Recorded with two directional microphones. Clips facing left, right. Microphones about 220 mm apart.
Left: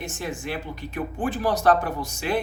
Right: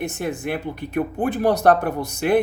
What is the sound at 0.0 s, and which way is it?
Speech, 60° right (ahead or behind).